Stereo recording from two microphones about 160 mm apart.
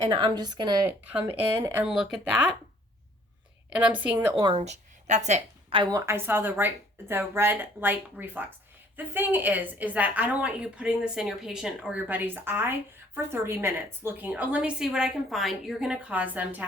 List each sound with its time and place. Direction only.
0.0 s speech: 30° right (ahead or behind)
1.1 s a woman's voice: 15° right (ahead or behind)
1.8 s speech: 5° right (ahead or behind)
3.7 s a woman's voice: 10° right (ahead or behind)
4.5 s speech: 45° right (ahead or behind)
5.8 s a woman's voice: 20° right (ahead or behind)